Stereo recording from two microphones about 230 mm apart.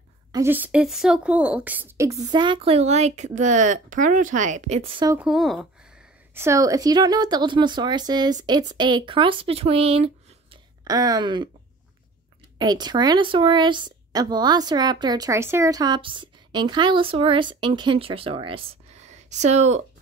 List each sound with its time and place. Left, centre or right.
0.3 s speech: centre
5.1 s a woman's voice: centre
12.5 s speech: centre